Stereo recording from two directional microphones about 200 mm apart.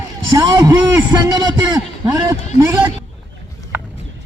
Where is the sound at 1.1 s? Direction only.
20° right (ahead or behind).